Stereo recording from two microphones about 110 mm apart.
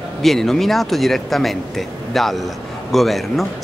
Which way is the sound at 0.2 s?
5° left (ahead or behind).